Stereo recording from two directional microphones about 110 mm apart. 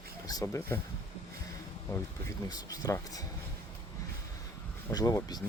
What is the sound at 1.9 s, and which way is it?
Speech, 30° left (ahead or behind).